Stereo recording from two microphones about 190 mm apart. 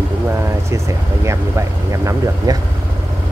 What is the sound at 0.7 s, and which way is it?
Speech, 15° right (ahead or behind).